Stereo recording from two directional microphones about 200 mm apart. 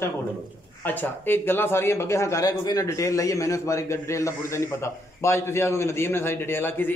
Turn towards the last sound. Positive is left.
turn(degrees=10)  # may be behind; listen again after turning